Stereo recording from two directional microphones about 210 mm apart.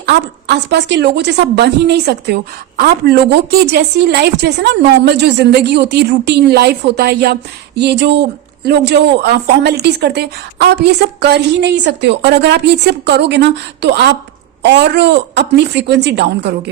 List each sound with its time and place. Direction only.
0.0 s a woman's voice: 55° right (ahead or behind)